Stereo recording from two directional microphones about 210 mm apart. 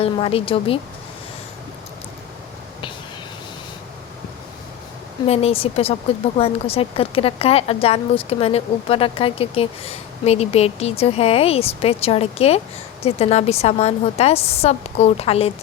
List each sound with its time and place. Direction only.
0.0 s a woman's voice: 25° left (ahead or behind)
5.2 s a woman's voice: 30° left (ahead or behind)